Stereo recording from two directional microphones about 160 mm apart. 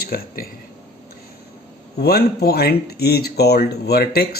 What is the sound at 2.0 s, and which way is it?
Speech, 80° left.